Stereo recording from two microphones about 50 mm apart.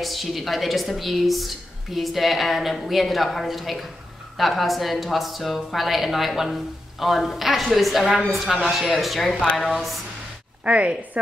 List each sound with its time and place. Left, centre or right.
0.0 s speech: centre
10.6 s a woman's voice: right